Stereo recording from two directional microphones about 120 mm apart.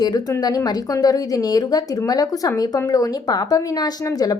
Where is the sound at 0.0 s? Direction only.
30° left (ahead or behind).